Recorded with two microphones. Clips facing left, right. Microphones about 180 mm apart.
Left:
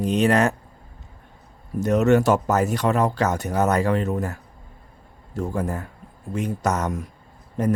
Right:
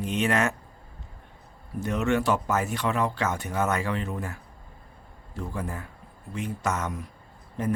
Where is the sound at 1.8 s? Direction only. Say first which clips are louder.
Left 8 dB; 40° left (ahead or behind).